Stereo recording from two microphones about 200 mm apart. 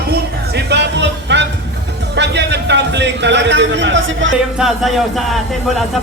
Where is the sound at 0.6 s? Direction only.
60° right (ahead or behind).